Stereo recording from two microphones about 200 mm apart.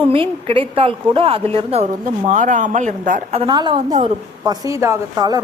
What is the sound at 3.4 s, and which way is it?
A woman's voice, 20° right (ahead or behind).